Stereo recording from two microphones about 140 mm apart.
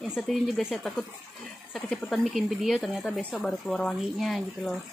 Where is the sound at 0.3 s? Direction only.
Centre (ahead or behind).